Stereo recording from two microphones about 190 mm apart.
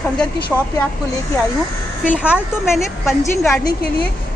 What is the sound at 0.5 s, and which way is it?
Speech, 5° left (ahead or behind).